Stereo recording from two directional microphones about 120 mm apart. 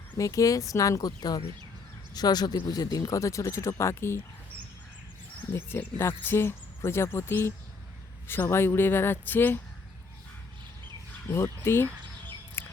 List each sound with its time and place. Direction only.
0.2 s speech: 30° left (ahead or behind)
5.4 s speech: 20° left (ahead or behind)
11.3 s speech: 20° left (ahead or behind)
12.6 s a sound: 20° left (ahead or behind)